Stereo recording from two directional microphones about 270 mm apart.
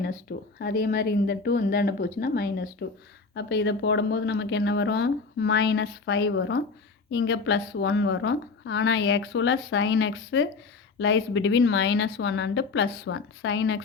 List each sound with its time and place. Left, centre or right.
0.6 s a woman's voice: left